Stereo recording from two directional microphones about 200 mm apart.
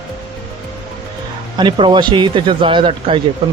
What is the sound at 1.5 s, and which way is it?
Speech, 20° right (ahead or behind).